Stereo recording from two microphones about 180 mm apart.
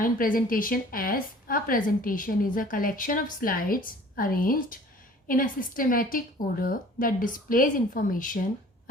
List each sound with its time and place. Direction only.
0.0 s a woman's voice: 50° left (ahead or behind)